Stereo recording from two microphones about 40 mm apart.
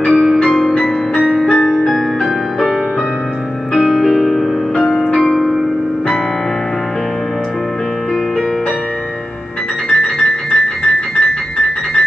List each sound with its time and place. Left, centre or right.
0.1 s music: centre
0.6 s music: centre
1.4 s music: centre
3.7 s music: centre
4.7 s music: centre
5.0 s music: centre
9.8 s music: centre